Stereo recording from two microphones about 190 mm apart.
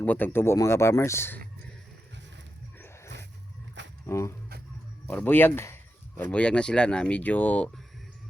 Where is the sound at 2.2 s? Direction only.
70° right (ahead or behind).